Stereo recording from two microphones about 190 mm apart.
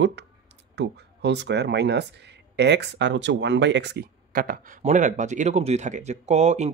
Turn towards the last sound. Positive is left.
turn(degrees=-35)  # may be behind; listen again after turning